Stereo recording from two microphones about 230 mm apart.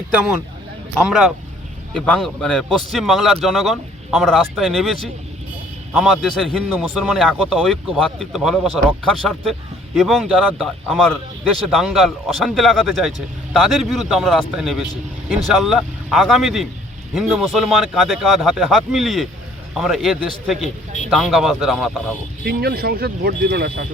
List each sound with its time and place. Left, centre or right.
1.0 s a man's voice: centre
22.4 s speech: right